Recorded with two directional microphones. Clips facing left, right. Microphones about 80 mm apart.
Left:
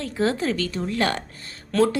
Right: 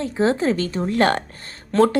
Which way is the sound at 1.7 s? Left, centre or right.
Right.